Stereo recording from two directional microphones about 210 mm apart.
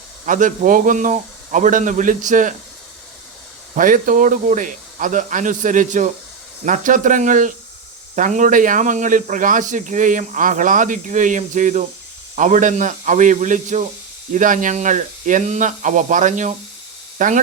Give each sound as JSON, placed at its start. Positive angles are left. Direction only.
{"t": 0.3, "sound": "speech", "side_deg": -40}
{"t": 3.8, "sound": "speech", "side_deg": -40}